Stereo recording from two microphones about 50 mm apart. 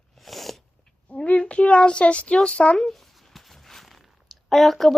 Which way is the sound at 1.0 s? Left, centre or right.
Left.